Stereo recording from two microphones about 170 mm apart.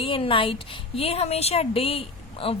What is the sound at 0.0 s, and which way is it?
A woman's voice, 30° left (ahead or behind).